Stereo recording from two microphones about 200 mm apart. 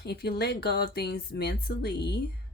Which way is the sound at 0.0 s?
55° left (ahead or behind).